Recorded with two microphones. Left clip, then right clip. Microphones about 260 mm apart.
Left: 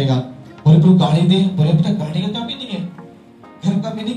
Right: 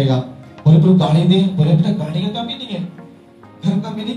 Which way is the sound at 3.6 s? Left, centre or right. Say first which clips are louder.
Left 1 dB; left.